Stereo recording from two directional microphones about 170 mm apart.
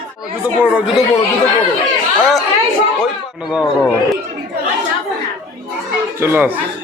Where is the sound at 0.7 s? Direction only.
Centre (ahead or behind).